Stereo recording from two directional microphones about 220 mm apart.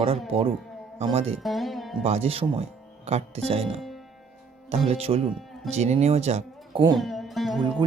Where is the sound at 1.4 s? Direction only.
Centre (ahead or behind).